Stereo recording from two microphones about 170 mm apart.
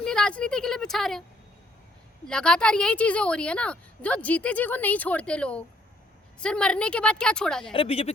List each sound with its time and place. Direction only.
0.0 s speech: 5° left (ahead or behind)
2.2 s a woman's voice: 5° left (ahead or behind)
7.6 s speech: 30° left (ahead or behind)